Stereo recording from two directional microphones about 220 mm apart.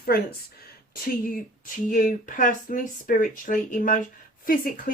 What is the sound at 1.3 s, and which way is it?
Speech, 35° left (ahead or behind).